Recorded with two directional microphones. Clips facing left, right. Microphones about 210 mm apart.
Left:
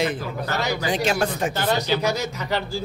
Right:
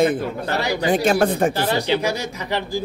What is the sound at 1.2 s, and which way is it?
Speech, 55° right (ahead or behind).